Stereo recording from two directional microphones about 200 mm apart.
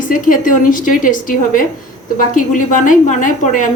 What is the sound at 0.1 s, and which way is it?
A woman's voice, 40° left (ahead or behind).